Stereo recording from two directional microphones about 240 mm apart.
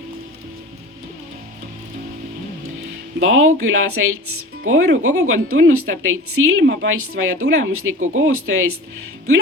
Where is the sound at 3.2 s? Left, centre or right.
Right.